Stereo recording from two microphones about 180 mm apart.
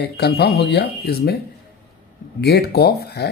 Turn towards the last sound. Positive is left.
turn(degrees=65)  # may be behind; listen again after turning